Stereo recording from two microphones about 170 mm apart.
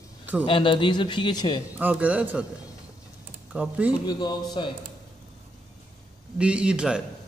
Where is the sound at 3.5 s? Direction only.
5° right (ahead or behind).